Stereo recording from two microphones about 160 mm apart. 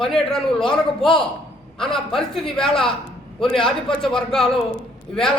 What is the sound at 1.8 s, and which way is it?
A man's voice, 5° left (ahead or behind).